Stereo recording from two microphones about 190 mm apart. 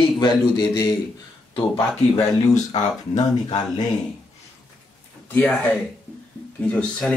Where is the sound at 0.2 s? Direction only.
20° left (ahead or behind).